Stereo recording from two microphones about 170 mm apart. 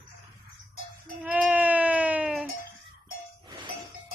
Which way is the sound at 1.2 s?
5° right (ahead or behind).